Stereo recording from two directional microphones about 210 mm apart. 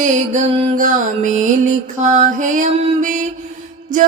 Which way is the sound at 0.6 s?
35° right (ahead or behind).